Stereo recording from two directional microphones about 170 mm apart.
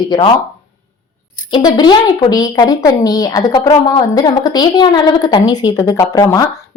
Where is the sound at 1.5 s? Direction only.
25° left (ahead or behind).